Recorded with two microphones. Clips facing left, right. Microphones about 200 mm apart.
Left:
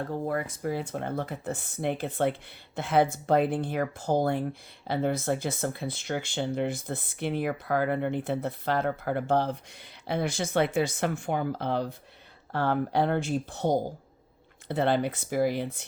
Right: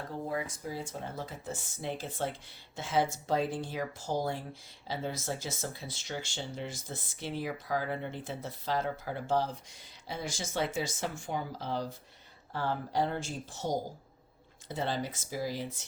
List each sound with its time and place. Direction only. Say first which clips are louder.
0.3 s speech: left 4 dB; 60° left (ahead or behind)